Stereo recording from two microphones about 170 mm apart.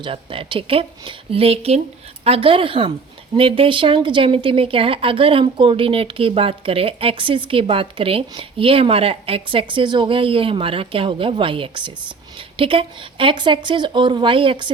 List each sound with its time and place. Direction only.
0.0 s speech: 30° right (ahead or behind)